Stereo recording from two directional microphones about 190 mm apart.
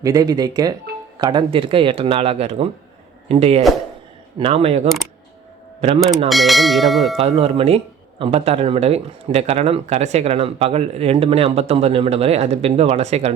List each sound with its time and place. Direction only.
0.0 s a man's voice: 20° right (ahead or behind)
6.2 s bell: centre (ahead or behind)
7.2 s a man's voice: 35° right (ahead or behind)